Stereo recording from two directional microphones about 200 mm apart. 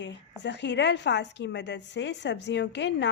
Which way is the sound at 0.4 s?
60° left (ahead or behind).